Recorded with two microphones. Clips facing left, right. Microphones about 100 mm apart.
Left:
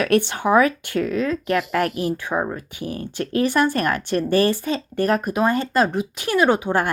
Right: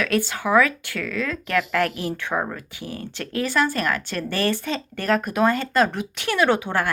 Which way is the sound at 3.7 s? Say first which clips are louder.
Left 3 dB; 45° left (ahead or behind).